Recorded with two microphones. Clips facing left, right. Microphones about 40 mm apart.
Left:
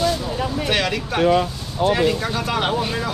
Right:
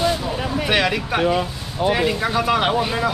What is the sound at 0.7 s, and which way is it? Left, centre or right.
Speech, centre.